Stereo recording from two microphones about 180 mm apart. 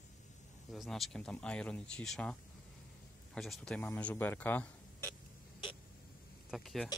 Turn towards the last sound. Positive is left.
turn(degrees=0)  # may be behind; listen again after turning